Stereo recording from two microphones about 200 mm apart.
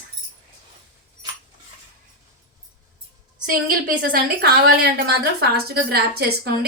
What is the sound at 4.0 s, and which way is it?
A woman's voice, 50° right (ahead or behind).